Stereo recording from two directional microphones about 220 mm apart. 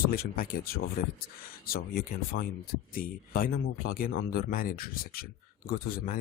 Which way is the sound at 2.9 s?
40° left (ahead or behind).